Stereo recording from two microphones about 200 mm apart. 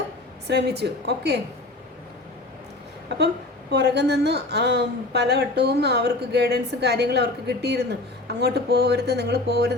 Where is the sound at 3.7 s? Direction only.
55° right (ahead or behind).